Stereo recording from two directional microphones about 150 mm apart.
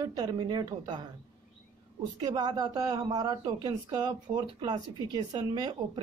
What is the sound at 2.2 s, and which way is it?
Speech, 25° right (ahead or behind).